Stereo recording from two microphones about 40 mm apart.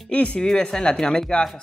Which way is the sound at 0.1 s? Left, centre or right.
Left.